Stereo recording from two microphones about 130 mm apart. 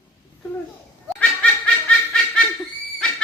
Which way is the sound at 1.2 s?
10° left (ahead or behind).